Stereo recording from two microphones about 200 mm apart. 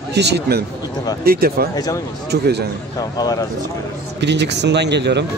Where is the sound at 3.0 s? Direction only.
20° left (ahead or behind).